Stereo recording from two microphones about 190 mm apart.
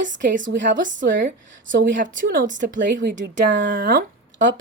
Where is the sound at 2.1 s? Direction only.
45° right (ahead or behind).